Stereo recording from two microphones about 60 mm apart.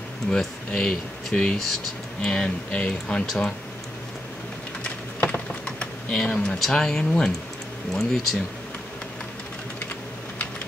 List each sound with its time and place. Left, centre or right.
0.3 s speech: centre
3.3 s speech: centre
5.3 s typing: centre
6.3 s speech: centre